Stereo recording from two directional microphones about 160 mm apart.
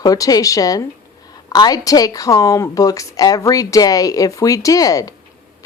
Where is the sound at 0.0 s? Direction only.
20° left (ahead or behind).